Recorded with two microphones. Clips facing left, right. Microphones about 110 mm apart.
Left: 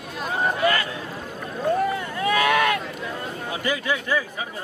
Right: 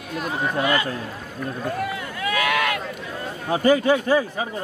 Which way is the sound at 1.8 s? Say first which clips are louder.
Left 3 dB; 30° left (ahead or behind).